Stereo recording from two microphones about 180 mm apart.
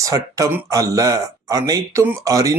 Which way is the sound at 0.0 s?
20° right (ahead or behind).